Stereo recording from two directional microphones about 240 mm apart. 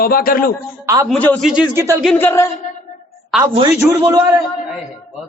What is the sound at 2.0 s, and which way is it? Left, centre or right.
Speech, centre.